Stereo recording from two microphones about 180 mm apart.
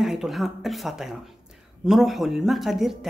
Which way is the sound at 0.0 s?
Centre (ahead or behind).